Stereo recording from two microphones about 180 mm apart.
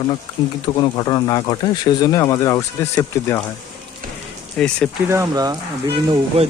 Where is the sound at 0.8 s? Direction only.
25° left (ahead or behind).